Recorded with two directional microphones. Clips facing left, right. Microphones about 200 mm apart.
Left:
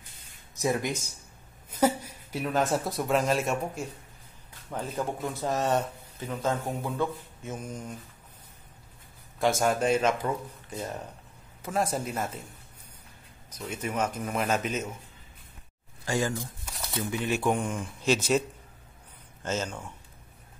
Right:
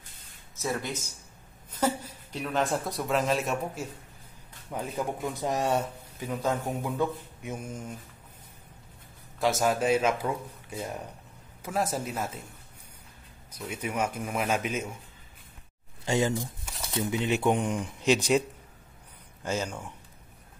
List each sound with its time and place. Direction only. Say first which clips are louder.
0.6 s speech: left 4 dB; 15° left (ahead or behind); by 5.3 s centre (ahead or behind)
5.4 s speech: left 1 dB; 10° right (ahead or behind)
6.4 s speech: even; centre (ahead or behind)
6.8 s speech: right 1 dB; 15° right (ahead or behind)
9.4 s speech: left 1 dB; centre (ahead or behind)
13.7 s speech: left 1 dB; 10° right (ahead or behind)
16.1 s speech: right 2 dB; 20° right (ahead or behind)
16.6 s crumpling: right 2 dB; centre (ahead or behind)
17.0 s speech: right 2 dB; 20° right (ahead or behind)
19.4 s speech: even; 10° right (ahead or behind)